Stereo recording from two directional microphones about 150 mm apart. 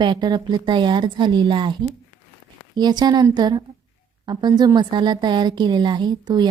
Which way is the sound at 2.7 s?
25° right (ahead or behind).